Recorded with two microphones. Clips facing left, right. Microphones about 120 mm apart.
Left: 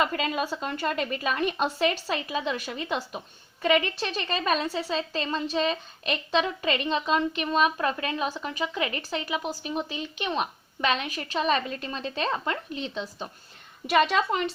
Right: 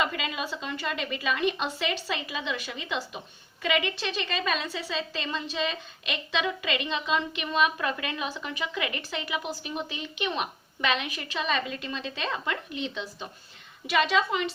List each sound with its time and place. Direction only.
0.0 s a woman's voice: 45° left (ahead or behind)
13.8 s a woman's voice: 50° left (ahead or behind)